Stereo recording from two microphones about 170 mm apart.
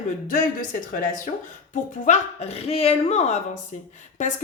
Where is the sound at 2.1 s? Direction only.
35° left (ahead or behind).